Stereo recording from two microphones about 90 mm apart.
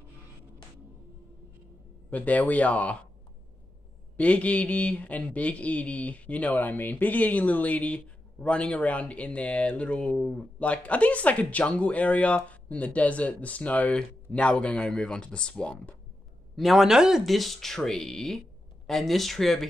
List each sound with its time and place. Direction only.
2.0 s speech: 15° left (ahead or behind)
4.2 s speech: 15° left (ahead or behind)
16.5 s speech: centre (ahead or behind)